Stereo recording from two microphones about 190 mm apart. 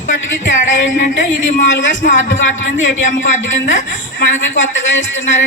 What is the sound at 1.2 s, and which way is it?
Speech, 65° left (ahead or behind).